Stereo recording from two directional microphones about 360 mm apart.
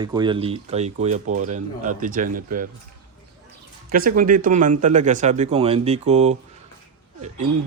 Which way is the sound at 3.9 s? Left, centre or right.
Right.